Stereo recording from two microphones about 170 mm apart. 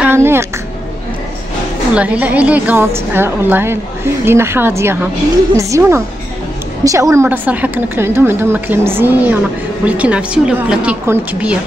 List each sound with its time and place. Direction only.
0.0 s a woman's voice: 15° right (ahead or behind)
2.0 s a woman's voice: 10° right (ahead or behind)